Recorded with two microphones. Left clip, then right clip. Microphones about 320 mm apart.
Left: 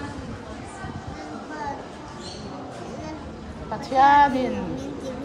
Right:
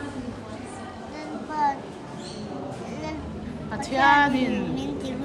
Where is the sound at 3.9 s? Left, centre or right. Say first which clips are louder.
Left 3 dB; centre.